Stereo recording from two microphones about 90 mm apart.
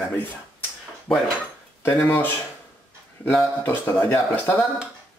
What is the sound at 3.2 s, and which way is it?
Speech, 10° left (ahead or behind).